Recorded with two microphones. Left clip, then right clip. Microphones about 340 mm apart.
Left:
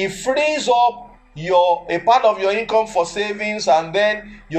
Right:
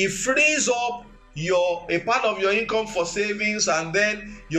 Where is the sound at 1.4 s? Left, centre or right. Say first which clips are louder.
Left 7 dB; centre.